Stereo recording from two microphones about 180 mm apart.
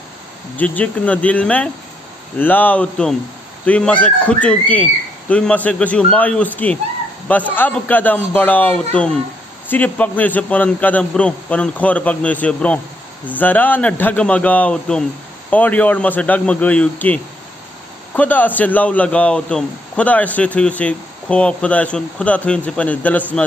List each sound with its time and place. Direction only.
0.6 s a man's voice: 10° left (ahead or behind)